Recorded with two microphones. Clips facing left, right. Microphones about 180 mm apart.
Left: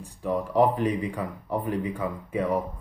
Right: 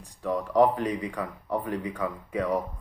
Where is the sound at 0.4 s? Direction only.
10° left (ahead or behind).